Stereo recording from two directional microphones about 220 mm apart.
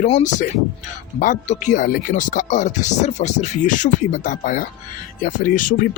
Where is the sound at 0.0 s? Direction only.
35° left (ahead or behind).